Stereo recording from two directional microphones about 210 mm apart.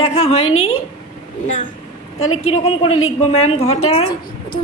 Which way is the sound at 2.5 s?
30° left (ahead or behind).